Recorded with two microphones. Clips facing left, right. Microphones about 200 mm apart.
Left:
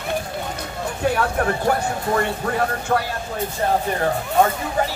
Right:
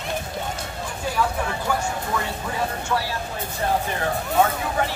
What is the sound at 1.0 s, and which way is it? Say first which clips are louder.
Speech: left 5 dB; 65° left (ahead or behind).